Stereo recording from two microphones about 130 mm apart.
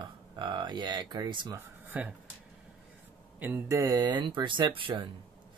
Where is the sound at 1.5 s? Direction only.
15° right (ahead or behind).